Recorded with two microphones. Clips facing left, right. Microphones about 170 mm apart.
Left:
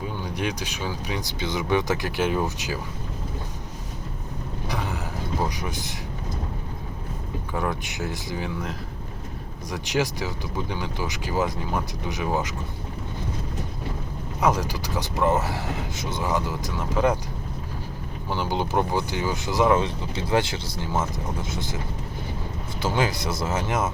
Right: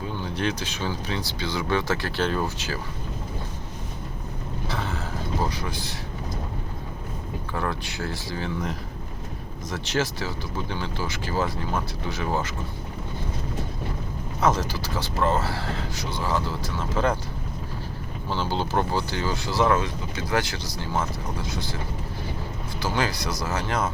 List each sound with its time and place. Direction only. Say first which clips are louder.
0.2 s speech: right 2 dB; 15° left (ahead or behind)
4.7 s a sound: left 1 dB; 15° left (ahead or behind)
5.5 s speech: even; 20° left (ahead or behind)
7.5 s speech: left 2 dB; 15° left (ahead or behind)
14.4 s speech: even; 10° left (ahead or behind)
18.3 s speech: left 1 dB; 15° left (ahead or behind)
22.8 s speech: left 2 dB; 20° left (ahead or behind)